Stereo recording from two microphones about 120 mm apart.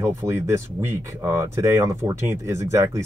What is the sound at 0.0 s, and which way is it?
Speech, 20° right (ahead or behind).